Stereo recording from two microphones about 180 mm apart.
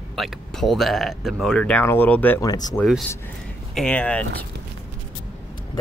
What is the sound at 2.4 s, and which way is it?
Speech, 20° left (ahead or behind).